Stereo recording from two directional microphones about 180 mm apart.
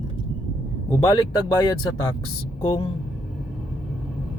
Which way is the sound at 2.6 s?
25° left (ahead or behind).